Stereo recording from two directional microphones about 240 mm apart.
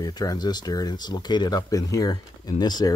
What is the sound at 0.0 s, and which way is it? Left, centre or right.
Speech, centre.